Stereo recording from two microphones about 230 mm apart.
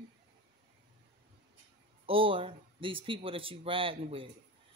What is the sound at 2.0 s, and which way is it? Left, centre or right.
Speech, right.